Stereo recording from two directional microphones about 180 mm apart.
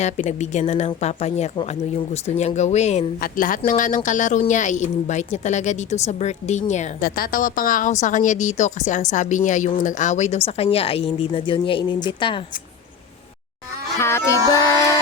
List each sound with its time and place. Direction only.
0.0 s speech: 40° left (ahead or behind)
3.2 s a woman's voice: 50° left (ahead or behind); by 12.4 s 25° left (ahead or behind)
14.0 s speech: 15° left (ahead or behind)